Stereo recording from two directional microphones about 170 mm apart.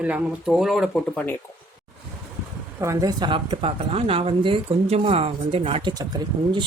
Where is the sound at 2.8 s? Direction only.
20° right (ahead or behind); by 5.9 s 35° right (ahead or behind).